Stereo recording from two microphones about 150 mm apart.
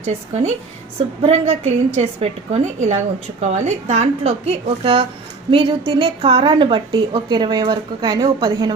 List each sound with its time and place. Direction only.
0.0 s a woman's voice: 50° right (ahead or behind); by 8.7 s 25° right (ahead or behind)